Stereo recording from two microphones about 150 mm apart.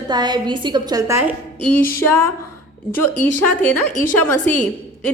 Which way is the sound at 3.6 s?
10° left (ahead or behind).